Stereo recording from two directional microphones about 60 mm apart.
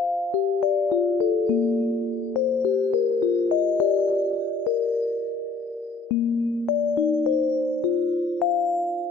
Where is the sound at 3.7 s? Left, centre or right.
Left.